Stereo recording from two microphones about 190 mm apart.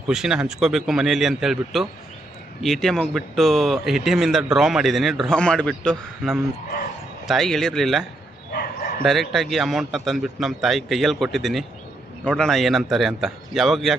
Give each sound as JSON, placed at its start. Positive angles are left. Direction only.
{"t": 0.1, "sound": "speech", "side_deg": -5}
{"t": 8.5, "sound": "bow-wow", "side_deg": 55}
{"t": 9.0, "sound": "speech", "side_deg": 0}